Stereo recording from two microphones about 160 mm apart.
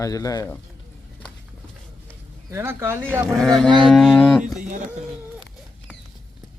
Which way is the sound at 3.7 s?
30° right (ahead or behind).